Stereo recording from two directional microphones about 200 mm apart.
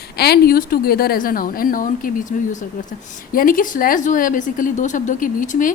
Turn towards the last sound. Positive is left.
turn(degrees=40)  # may be behind; listen again after turning